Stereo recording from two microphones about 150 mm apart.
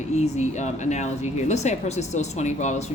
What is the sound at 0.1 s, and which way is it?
A woman's voice, 50° left (ahead or behind).